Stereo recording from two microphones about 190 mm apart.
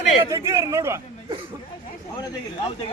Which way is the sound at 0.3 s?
15° right (ahead or behind).